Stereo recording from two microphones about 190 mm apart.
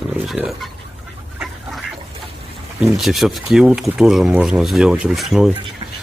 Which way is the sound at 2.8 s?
Centre (ahead or behind).